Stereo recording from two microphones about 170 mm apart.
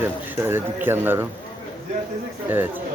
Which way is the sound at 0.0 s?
15° right (ahead or behind).